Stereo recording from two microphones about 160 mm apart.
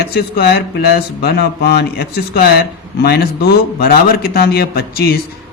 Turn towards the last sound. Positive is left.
turn(degrees=75)  # may be behind; listen again after turning